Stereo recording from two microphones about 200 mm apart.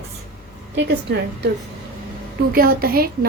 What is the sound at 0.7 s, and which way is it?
Speech, 60° right (ahead or behind).